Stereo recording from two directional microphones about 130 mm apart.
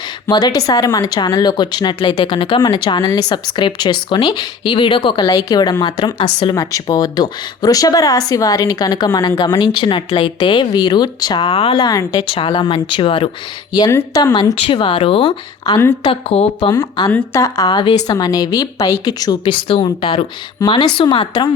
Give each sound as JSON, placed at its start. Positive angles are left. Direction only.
{"t": 0.3, "sound": "speech", "side_deg": 35}
{"t": 5.2, "sound": "a woman's voice", "side_deg": 30}
{"t": 6.6, "sound": "speech", "side_deg": 25}
{"t": 11.8, "sound": "a woman's voice", "side_deg": 30}
{"t": 12.3, "sound": "speech", "side_deg": 40}
{"t": 13.9, "sound": "a woman's voice", "side_deg": 30}
{"t": 14.5, "sound": "speech", "side_deg": 45}
{"t": 15.6, "sound": "a woman's voice", "side_deg": 30}
{"t": 16.0, "sound": "speech", "side_deg": 50}
{"t": 17.0, "sound": "a woman's voice", "side_deg": 30}